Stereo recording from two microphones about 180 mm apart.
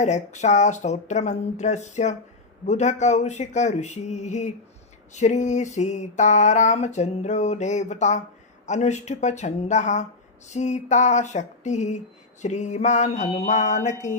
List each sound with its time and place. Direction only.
0.0 s speech: 40° left (ahead or behind)